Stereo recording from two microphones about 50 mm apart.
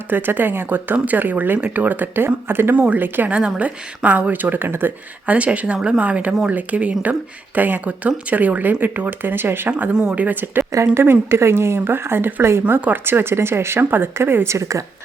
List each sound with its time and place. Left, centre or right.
0.1 s speech: right
2.7 s speech: right
5.2 s speech: right
6.0 s speech: right
10.1 s a woman's voice: right
12.6 s speech: right
14.4 s a woman's voice: right